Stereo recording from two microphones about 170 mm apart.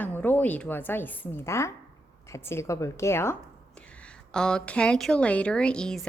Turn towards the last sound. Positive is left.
turn(degrees=5)  # may be behind; listen again after turning